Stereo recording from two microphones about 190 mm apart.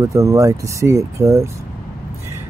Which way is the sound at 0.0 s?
15° right (ahead or behind).